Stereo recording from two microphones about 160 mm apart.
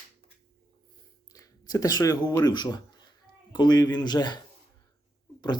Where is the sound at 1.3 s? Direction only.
20° left (ahead or behind).